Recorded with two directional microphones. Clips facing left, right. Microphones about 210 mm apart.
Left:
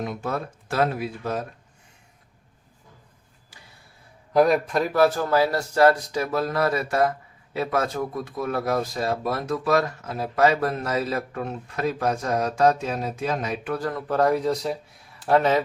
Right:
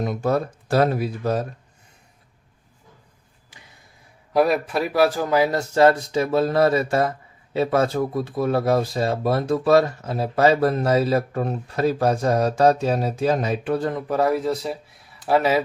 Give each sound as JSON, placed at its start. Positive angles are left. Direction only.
{"t": 0.0, "sound": "speech", "side_deg": -40}
{"t": 4.4, "sound": "speech", "side_deg": -5}
{"t": 14.1, "sound": "speech", "side_deg": -5}